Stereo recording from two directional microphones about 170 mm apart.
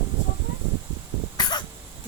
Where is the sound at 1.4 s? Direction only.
25° left (ahead or behind).